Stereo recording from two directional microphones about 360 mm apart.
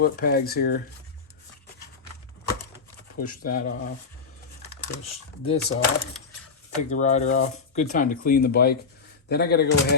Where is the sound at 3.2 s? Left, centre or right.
Left.